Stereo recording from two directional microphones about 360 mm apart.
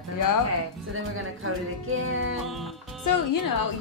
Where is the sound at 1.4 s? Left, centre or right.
Right.